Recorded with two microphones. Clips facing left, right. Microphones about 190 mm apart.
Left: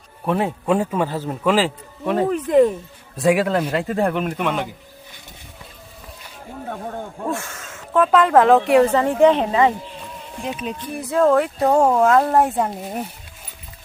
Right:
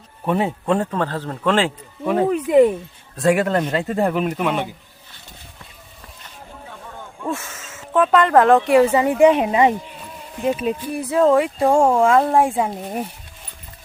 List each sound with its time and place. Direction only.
0.3 s speech: centre (ahead or behind)
6.7 s a sound: 50° left (ahead or behind)
7.3 s speech: centre (ahead or behind)
10.4 s speech: 5° right (ahead or behind)